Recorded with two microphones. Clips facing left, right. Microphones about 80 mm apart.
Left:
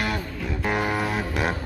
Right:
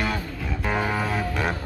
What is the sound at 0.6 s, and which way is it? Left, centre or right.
Music, centre.